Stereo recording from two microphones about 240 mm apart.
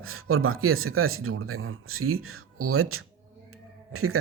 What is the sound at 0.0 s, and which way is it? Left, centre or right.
Speech, right.